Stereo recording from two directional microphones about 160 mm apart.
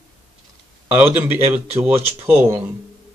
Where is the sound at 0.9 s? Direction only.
10° right (ahead or behind).